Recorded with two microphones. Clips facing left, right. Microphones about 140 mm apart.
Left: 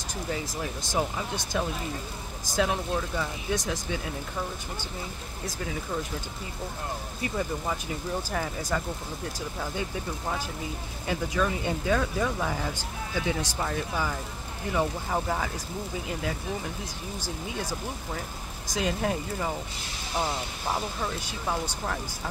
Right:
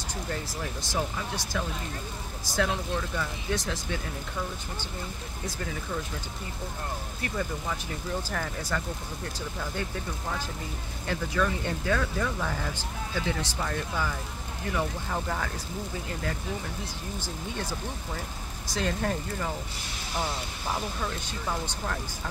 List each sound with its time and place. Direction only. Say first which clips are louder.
0.9 s speech: left 3 dB; 20° left (ahead or behind)
7.2 s speech: left 2 dB; 15° left (ahead or behind)
11.1 s speech: left 1 dB; 15° left (ahead or behind)